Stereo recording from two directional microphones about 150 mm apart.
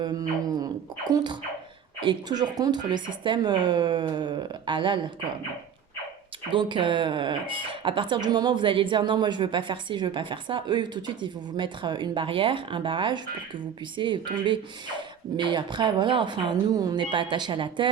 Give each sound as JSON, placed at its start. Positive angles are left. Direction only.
{"t": 0.0, "sound": "speech", "side_deg": -25}
{"t": 6.5, "sound": "speech", "side_deg": -30}